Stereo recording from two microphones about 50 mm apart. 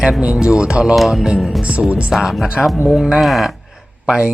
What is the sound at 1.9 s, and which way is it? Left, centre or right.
Speech, right.